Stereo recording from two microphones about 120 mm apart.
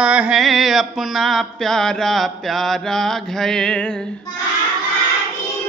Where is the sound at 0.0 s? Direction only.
10° right (ahead or behind); by 3.9 s 5° left (ahead or behind).